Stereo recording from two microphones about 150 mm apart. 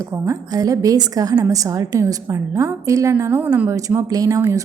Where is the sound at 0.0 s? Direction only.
20° right (ahead or behind).